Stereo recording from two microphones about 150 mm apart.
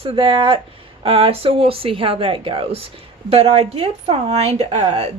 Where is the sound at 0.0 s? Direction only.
35° right (ahead or behind).